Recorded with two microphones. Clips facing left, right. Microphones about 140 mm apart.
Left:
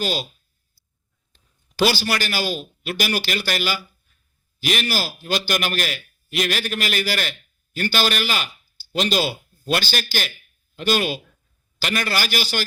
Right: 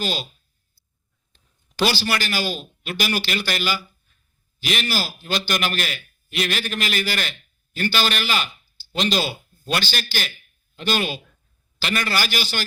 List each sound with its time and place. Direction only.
0.0 s speech: 40° left (ahead or behind)
1.9 s a man's voice: 40° left (ahead or behind)